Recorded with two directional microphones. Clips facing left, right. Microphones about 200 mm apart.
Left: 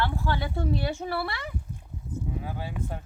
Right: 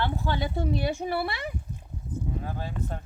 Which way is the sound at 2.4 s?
10° left (ahead or behind).